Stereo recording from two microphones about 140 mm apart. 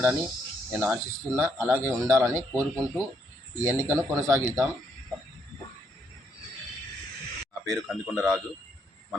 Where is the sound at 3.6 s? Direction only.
20° right (ahead or behind).